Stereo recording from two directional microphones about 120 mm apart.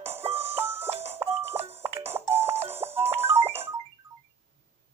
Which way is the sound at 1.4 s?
55° right (ahead or behind).